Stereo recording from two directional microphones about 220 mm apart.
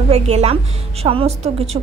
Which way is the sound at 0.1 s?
30° right (ahead or behind).